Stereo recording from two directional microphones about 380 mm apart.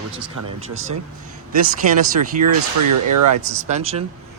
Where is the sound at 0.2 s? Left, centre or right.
Right.